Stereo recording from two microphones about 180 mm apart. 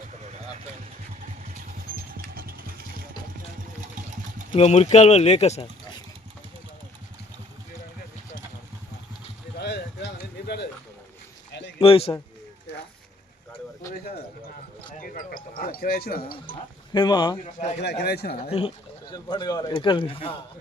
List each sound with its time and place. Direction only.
2.1 s vehicle: 55° right (ahead or behind)
4.5 s speech: 35° left (ahead or behind)
9.6 s a sound: 70° left (ahead or behind)
11.8 s speech: 30° left (ahead or behind)
14.9 s a sound: 50° left (ahead or behind)
16.5 s speech: 25° left (ahead or behind)
17.4 s speech: 40° left (ahead or behind)
17.8 s a man's voice: 65° left (ahead or behind)
18.5 s speech: 30° left (ahead or behind)